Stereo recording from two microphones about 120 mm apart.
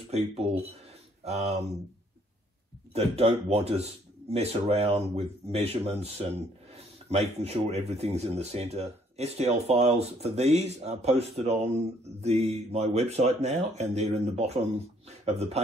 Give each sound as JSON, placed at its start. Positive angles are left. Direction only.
{"t": 0.1, "sound": "speech", "side_deg": -60}
{"t": 2.9, "sound": "speech", "side_deg": -60}